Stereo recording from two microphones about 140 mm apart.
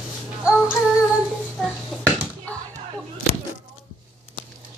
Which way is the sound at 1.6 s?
5° left (ahead or behind).